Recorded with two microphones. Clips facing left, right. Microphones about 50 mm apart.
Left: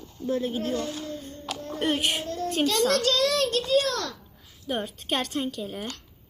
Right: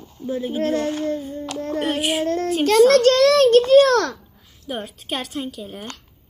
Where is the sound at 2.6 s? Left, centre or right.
Right.